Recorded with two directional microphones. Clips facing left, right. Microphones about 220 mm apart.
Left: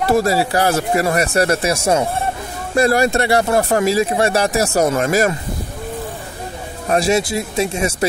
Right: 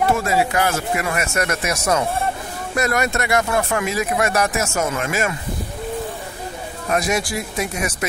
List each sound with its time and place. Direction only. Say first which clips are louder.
0.1 s speech: left 4 dB; 35° left (ahead or behind)
6.9 s speech: left 5 dB; 30° left (ahead or behind)